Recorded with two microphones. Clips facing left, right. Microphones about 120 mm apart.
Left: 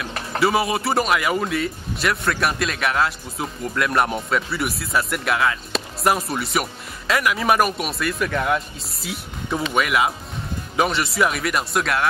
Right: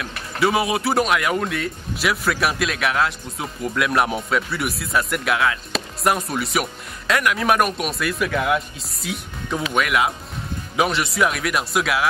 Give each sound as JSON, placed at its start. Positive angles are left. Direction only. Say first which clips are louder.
{"t": 0.4, "sound": "speech", "louder": "even", "side_deg": 0}